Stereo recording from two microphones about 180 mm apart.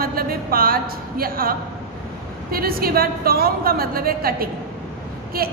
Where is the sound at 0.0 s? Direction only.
55° right (ahead or behind).